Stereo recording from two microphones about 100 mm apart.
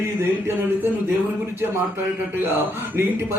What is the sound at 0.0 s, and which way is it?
A man's voice, 25° right (ahead or behind).